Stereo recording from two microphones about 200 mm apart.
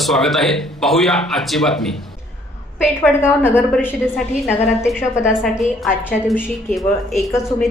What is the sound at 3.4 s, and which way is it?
A woman's voice, 10° left (ahead or behind).